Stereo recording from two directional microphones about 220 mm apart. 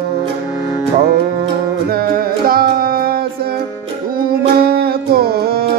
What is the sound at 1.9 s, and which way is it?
Music, 45° right (ahead or behind).